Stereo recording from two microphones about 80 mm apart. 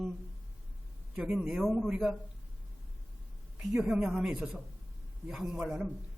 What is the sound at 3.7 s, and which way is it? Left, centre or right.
A man's voice, centre.